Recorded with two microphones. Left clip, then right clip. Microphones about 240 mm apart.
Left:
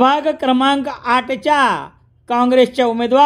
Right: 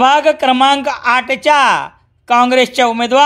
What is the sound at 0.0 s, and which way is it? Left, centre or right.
Speech, centre.